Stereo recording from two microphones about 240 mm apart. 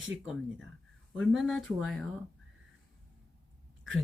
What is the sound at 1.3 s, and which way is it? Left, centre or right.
Speech, centre.